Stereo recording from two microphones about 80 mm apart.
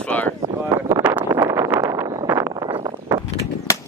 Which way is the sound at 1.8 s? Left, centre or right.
Right.